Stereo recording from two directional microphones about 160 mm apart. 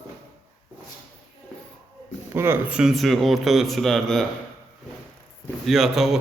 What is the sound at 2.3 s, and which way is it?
A man's voice, 10° right (ahead or behind).